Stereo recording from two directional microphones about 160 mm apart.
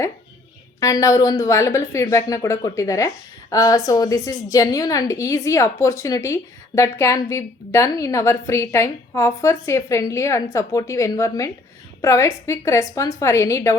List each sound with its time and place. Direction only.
0.8 s a woman's voice: 20° left (ahead or behind)